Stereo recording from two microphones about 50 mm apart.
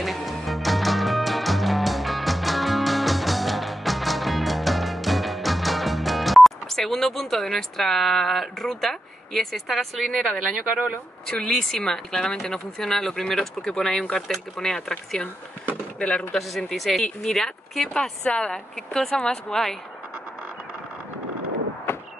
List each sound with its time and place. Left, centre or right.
0.0 s music: centre
11.2 s speech: centre
16.3 s speech: centre
18.2 s speech: centre
21.9 s a sound: left